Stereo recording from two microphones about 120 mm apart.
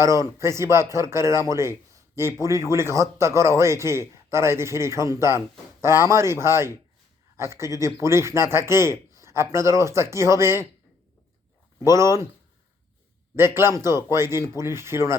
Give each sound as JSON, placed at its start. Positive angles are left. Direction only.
{"t": 0.0, "sound": "speech", "side_deg": -25}
{"t": 11.8, "sound": "speech", "side_deg": -25}
{"t": 13.3, "sound": "speech", "side_deg": -20}